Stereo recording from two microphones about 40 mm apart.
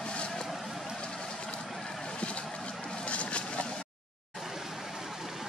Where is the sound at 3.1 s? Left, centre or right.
Left.